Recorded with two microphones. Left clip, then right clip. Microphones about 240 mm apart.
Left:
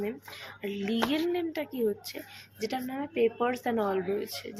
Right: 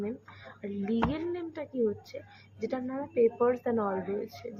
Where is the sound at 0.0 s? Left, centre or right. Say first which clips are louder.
Left 3 dB; left.